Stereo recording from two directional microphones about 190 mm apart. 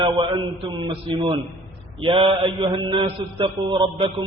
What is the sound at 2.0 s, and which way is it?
Mantra, 25° right (ahead or behind).